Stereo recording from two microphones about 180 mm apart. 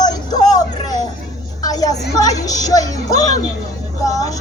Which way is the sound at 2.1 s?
20° left (ahead or behind).